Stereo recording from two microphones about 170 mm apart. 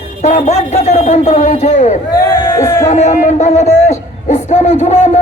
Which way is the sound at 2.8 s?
40° left (ahead or behind).